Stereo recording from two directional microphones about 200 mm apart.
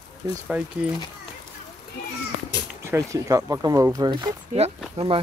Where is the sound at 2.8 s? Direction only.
15° right (ahead or behind).